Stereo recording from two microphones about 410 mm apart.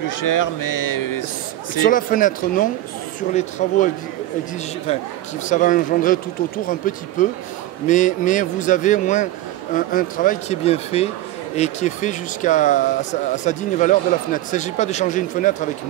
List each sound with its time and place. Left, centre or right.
0.0 s speech: left
1.8 s speech: centre
5.5 s speech: centre